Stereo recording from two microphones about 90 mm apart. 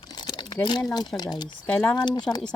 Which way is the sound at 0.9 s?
50° left (ahead or behind).